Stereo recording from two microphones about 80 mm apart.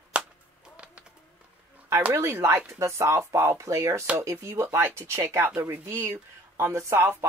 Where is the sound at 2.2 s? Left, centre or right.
Right.